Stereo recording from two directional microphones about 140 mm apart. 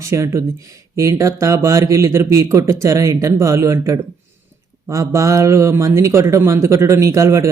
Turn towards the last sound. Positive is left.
turn(degrees=-20)  # may be behind; listen again after turning